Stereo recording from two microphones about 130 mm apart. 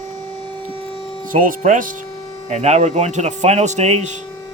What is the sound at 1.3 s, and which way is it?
Speech, 90° right.